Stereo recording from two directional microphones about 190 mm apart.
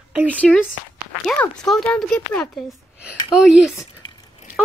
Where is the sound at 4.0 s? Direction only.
20° left (ahead or behind).